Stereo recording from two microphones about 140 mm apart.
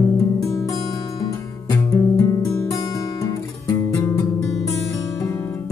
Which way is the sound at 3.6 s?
20° left (ahead or behind).